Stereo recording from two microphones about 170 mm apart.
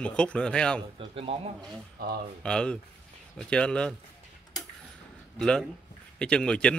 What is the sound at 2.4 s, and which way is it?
Speech, 5° left (ahead or behind).